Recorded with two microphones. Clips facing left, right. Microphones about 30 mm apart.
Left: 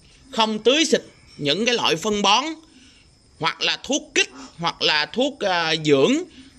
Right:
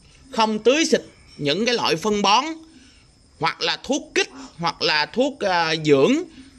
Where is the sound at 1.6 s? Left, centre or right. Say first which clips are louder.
Left 1 dB; right.